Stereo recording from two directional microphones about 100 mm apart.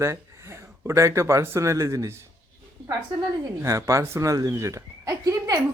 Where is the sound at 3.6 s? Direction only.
30° right (ahead or behind).